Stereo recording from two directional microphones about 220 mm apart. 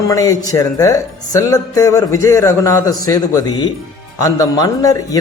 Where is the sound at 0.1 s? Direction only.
15° left (ahead or behind).